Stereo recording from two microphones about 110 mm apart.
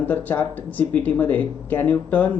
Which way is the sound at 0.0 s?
15° left (ahead or behind).